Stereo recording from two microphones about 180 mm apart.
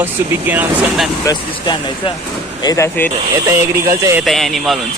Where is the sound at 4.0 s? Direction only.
15° right (ahead or behind).